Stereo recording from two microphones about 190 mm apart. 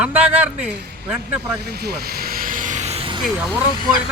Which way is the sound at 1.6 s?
55° right (ahead or behind).